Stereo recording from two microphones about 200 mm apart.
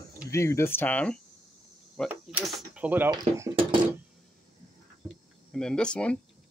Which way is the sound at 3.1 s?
20° right (ahead or behind).